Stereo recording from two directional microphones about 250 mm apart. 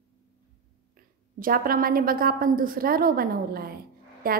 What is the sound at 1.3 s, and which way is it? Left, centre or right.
A woman's voice, right.